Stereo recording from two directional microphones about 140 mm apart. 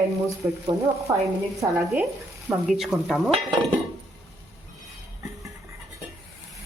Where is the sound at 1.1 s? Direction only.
20° right (ahead or behind).